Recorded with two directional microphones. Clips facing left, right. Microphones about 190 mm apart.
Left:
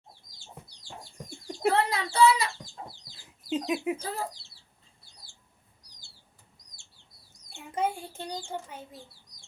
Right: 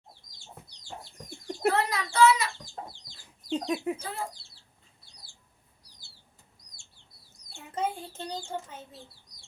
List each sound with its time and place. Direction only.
1.6 s speech: 30° left (ahead or behind)
2.9 s chicken: 5° left (ahead or behind)
3.9 s speech: 35° left (ahead or behind)
7.5 s a child's voice: 10° left (ahead or behind)